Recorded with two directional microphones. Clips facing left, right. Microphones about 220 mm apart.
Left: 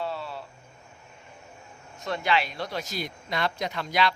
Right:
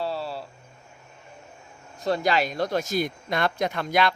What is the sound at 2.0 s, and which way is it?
Speech, 35° right (ahead or behind).